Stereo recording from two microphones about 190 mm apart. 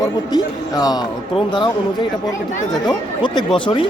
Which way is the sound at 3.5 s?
25° left (ahead or behind).